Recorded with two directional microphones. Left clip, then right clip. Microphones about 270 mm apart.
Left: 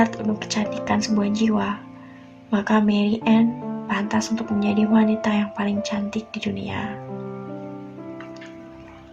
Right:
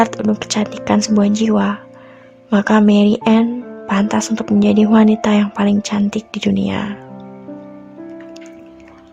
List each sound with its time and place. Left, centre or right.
0.0 s speech: right